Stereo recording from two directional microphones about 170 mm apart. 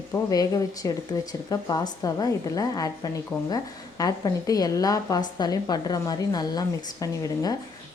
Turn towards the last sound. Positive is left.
turn(degrees=20)  # may be behind; listen again after turning